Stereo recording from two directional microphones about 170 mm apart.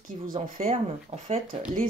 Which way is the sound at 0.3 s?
35° right (ahead or behind).